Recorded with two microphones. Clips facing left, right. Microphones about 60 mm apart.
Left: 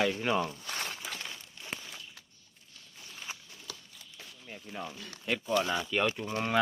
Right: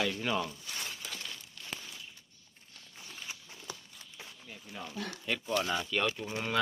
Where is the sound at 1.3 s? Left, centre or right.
Left.